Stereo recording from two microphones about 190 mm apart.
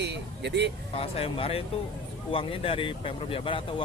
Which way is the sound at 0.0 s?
65° right (ahead or behind).